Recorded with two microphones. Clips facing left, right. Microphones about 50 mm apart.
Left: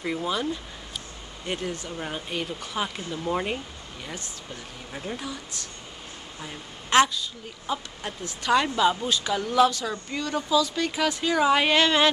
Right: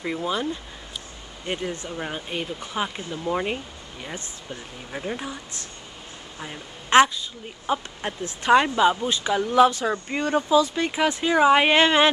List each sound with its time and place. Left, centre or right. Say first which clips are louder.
0.0 s speech: right 1 dB; centre
1.5 s speech: right 2 dB; centre
4.0 s a woman's voice: right 2 dB; right